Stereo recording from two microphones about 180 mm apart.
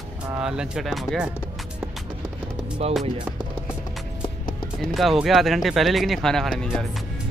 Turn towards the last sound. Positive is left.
turn(degrees=0)  # may be behind; listen again after turning